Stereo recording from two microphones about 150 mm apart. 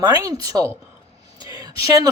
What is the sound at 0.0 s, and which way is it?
Speech, 25° right (ahead or behind).